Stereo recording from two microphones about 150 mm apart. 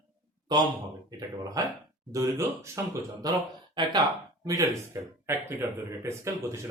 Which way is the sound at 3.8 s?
30° right (ahead or behind).